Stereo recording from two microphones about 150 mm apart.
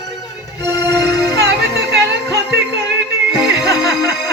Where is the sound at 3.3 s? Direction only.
5° right (ahead or behind).